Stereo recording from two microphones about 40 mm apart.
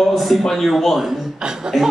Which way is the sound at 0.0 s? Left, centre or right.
Centre.